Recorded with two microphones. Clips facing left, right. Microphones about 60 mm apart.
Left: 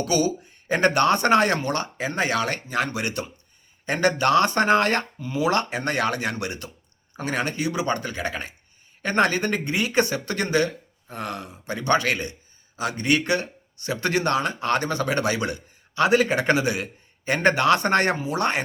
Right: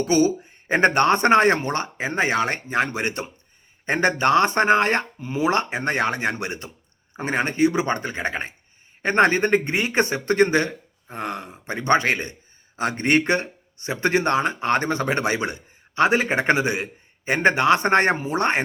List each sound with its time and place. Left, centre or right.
0.0 s speech: right